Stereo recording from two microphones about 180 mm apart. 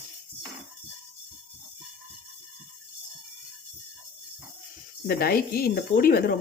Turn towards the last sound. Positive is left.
turn(degrees=55)  # may be behind; listen again after turning